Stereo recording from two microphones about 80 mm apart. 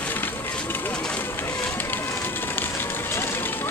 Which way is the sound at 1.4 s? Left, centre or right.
Left.